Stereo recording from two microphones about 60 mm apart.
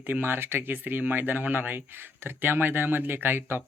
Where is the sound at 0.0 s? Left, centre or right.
Right.